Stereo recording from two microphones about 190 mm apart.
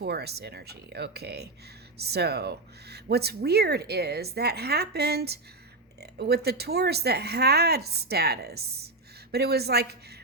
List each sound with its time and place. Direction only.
0.0 s speech: 60° right (ahead or behind)